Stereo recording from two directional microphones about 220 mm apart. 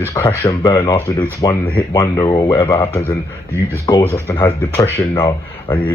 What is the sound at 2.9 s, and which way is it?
Speech, 10° left (ahead or behind).